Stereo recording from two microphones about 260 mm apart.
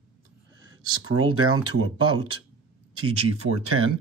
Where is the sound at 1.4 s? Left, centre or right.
Right.